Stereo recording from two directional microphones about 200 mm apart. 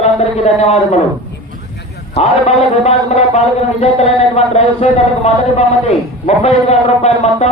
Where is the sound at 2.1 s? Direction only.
30° left (ahead or behind).